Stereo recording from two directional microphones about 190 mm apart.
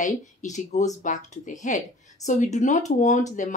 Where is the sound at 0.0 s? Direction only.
40° left (ahead or behind).